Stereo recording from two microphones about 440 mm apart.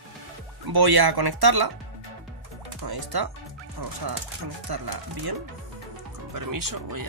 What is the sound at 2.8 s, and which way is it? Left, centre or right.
Speech, right.